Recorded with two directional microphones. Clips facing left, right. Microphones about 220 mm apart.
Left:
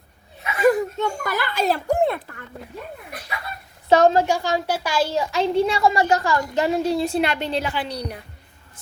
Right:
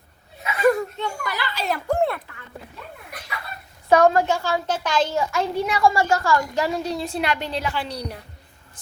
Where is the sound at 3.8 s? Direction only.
25° left (ahead or behind); by 5.2 s 10° left (ahead or behind).